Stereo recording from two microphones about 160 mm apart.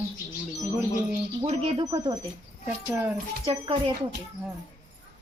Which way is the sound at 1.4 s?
40° right (ahead or behind).